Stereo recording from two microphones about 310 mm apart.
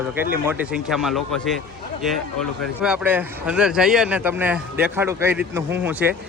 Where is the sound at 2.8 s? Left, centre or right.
Centre.